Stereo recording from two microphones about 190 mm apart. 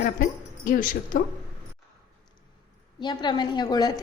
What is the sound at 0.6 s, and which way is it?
Speech, 45° left (ahead or behind).